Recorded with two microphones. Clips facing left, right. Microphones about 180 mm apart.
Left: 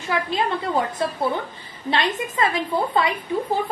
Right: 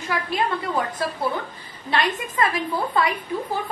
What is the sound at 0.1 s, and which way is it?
A woman's voice, 25° left (ahead or behind).